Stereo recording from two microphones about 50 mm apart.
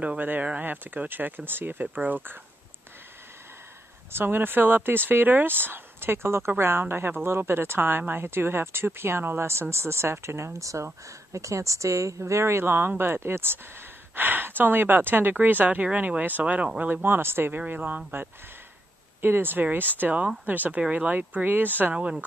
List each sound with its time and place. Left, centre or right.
0.2 s speech: right
4.1 s speech: right
6.5 s speech: right
9.4 s speech: right
14.1 s speech: right
16.9 s speech: right
17.6 s speech: right
19.2 s speech: right
20.0 s speech: right
21.9 s speech: right